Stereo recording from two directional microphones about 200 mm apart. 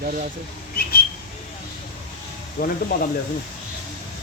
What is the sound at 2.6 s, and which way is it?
Speech, 50° left (ahead or behind).